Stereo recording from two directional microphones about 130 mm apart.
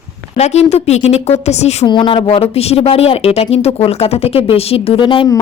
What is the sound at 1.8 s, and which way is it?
Speech, 40° left (ahead or behind).